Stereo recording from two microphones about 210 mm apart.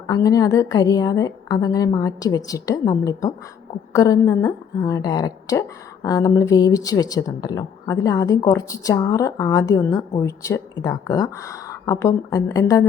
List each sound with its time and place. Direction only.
0.1 s a woman's voice: 15° left (ahead or behind)